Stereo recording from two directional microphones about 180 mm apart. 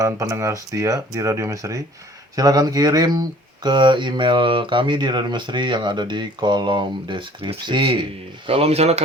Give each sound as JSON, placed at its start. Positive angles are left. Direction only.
{"t": 0.0, "sound": "speech", "side_deg": -15}